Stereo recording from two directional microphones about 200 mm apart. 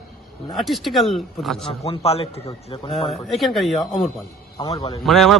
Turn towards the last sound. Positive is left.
turn(degrees=0)  # may be behind; listen again after turning